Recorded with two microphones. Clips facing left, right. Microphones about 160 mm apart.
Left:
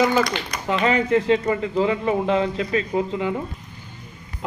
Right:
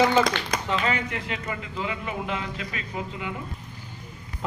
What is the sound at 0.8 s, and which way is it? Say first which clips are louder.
Speech: left 9 dB; 35° left (ahead or behind).